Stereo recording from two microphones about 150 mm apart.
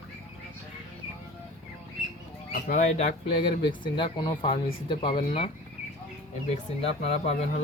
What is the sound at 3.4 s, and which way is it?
Speech, 35° left (ahead or behind).